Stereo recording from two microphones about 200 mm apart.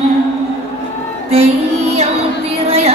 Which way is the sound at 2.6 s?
30° right (ahead or behind).